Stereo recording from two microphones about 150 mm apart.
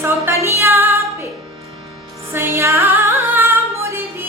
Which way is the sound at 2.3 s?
15° right (ahead or behind).